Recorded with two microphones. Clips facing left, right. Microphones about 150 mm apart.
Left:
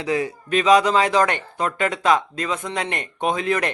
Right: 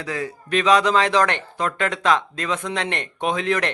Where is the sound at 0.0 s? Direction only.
20° left (ahead or behind).